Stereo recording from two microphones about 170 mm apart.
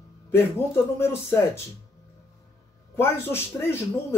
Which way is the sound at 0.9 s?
15° left (ahead or behind).